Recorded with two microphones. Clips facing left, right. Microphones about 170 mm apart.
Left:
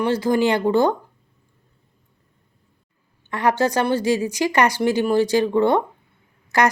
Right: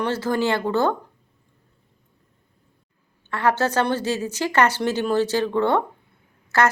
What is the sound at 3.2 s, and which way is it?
Speech, 15° left (ahead or behind).